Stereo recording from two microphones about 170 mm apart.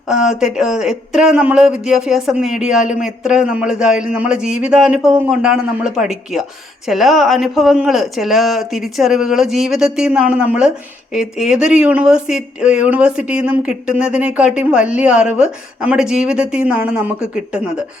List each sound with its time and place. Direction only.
0.1 s speech: 5° right (ahead or behind)